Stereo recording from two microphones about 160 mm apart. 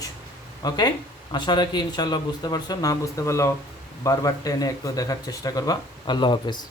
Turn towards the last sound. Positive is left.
turn(degrees=30)  # may be behind; listen again after turning